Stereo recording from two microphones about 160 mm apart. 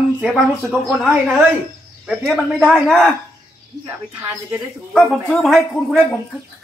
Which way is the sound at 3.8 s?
15° right (ahead or behind).